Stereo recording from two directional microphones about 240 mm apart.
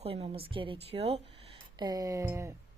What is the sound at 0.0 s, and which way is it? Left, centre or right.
A woman's voice, right.